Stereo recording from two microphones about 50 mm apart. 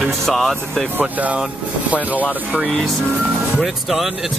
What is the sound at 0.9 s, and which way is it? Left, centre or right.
Speech, right.